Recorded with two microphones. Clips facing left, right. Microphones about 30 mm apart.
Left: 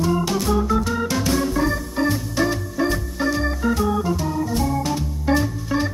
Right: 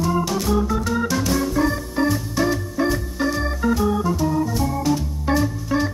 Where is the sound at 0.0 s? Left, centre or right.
Centre.